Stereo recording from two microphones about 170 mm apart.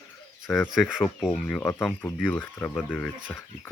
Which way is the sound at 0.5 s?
Centre (ahead or behind).